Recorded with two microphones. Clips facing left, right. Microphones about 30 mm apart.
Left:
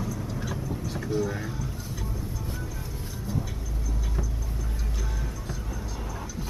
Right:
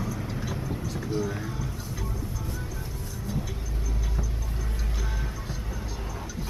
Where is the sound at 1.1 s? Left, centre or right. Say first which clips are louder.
Left 2 dB; centre.